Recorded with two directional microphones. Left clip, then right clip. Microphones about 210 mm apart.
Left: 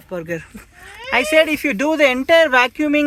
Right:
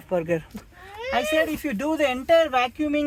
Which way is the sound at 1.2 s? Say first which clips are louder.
Left 8 dB; 25° left (ahead or behind).